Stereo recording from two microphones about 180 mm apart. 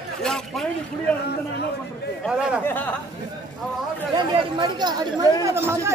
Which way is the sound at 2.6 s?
10° left (ahead or behind).